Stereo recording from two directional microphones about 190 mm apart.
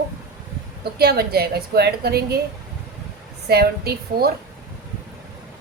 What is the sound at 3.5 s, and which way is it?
Speech, 55° right (ahead or behind).